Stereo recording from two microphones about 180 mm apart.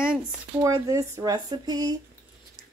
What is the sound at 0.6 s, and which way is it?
Speech, 15° right (ahead or behind).